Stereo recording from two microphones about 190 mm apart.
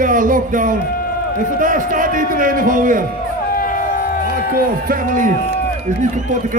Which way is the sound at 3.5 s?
45° left (ahead or behind).